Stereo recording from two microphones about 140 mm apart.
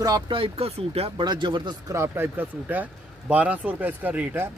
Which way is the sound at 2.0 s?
15° right (ahead or behind).